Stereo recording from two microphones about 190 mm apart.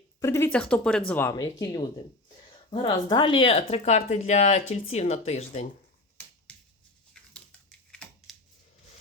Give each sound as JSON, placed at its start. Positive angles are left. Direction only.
{"t": 0.2, "sound": "speech", "side_deg": 15}
{"t": 6.5, "sound": "shuffling cards", "side_deg": 5}
{"t": 7.9, "sound": "a sound", "side_deg": 5}